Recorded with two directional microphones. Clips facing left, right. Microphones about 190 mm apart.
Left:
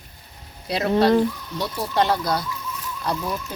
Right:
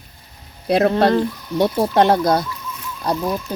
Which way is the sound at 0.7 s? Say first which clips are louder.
Right 3 dB; 55° right (ahead or behind).